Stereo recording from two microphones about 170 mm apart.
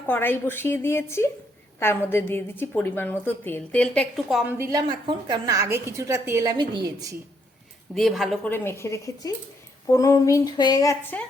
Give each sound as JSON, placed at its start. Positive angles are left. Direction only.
{"t": 0.1, "sound": "a woman's voice", "side_deg": 10}
{"t": 4.5, "sound": "a woman's voice", "side_deg": -25}
{"t": 7.9, "sound": "a woman's voice", "side_deg": 0}
{"t": 8.4, "sound": "a woman's voice", "side_deg": 15}
{"t": 9.9, "sound": "a sound", "side_deg": 20}
{"t": 11.1, "sound": "a woman's voice", "side_deg": 10}